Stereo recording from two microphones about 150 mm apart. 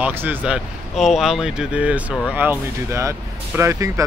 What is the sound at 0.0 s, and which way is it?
Speech, 15° right (ahead or behind).